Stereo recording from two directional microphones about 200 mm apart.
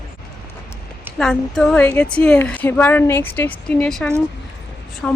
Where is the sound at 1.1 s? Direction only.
Centre (ahead or behind).